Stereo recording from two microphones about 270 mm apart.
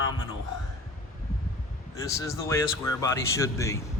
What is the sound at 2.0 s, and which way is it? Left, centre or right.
Speech, centre.